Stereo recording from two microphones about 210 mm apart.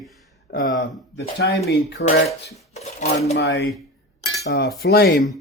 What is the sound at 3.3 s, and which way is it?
A man's voice, 55° left (ahead or behind).